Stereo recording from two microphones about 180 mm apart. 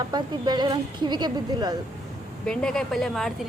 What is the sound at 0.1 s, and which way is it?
Speech, 25° right (ahead or behind).